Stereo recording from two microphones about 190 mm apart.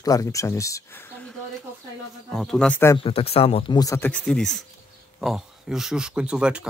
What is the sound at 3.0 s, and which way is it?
Speech, 30° left (ahead or behind).